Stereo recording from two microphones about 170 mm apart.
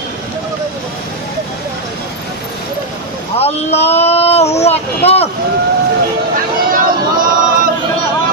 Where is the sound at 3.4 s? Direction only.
40° left (ahead or behind).